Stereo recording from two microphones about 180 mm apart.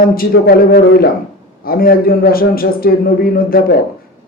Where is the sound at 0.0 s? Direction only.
55° left (ahead or behind).